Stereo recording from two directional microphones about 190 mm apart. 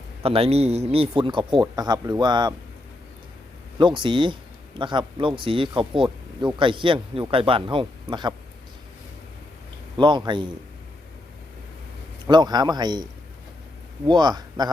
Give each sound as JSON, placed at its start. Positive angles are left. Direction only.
{"t": 0.2, "sound": "a man's voice", "side_deg": -30}
{"t": 3.8, "sound": "a man's voice", "side_deg": -25}
{"t": 10.0, "sound": "a man's voice", "side_deg": -25}
{"t": 12.3, "sound": "a man's voice", "side_deg": -20}
{"t": 14.1, "sound": "a man's voice", "side_deg": -20}